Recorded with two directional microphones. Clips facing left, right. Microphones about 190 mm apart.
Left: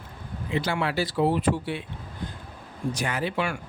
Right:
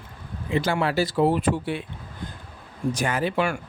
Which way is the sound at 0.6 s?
40° right (ahead or behind).